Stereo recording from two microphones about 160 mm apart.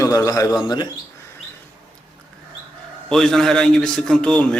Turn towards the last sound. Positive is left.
turn(degrees=5)  # may be behind; listen again after turning